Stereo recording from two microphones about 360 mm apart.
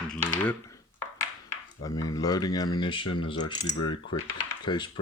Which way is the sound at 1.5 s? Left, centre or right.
Centre.